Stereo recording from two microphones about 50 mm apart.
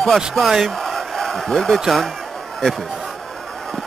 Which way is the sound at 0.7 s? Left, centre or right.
Centre.